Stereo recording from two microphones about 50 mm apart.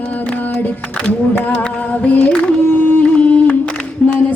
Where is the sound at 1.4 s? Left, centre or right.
Left.